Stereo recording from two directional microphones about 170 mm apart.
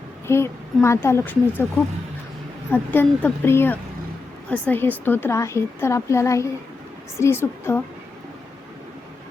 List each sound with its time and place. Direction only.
0.3 s a woman's voice: 15° left (ahead or behind)
2.6 s a woman's voice: 10° left (ahead or behind)